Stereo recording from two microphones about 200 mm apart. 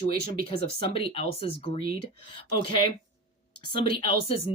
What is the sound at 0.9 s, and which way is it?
Speech, 25° left (ahead or behind).